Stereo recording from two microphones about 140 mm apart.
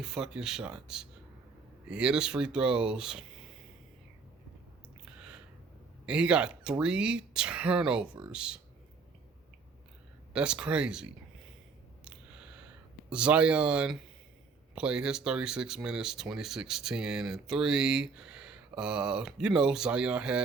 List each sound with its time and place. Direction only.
0.0 s speech: 5° right (ahead or behind)
6.1 s speech: 10° right (ahead or behind)
10.3 s speech: 5° right (ahead or behind)
13.1 s speech: 10° right (ahead or behind)